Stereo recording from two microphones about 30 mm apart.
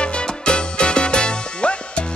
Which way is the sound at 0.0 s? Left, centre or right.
Left.